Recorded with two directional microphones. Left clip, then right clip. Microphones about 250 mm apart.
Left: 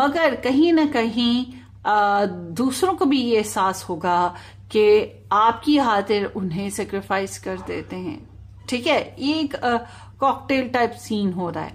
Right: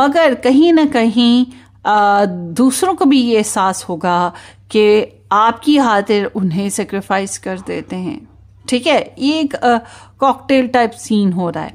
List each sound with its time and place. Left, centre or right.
0.0 s a woman's voice: right